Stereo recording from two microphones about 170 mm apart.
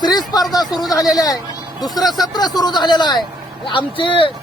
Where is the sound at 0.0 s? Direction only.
25° left (ahead or behind).